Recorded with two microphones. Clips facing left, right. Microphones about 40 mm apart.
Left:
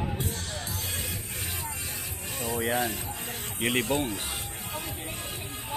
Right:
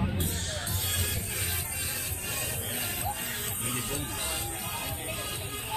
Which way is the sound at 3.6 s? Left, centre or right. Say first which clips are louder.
Left 11 dB; left.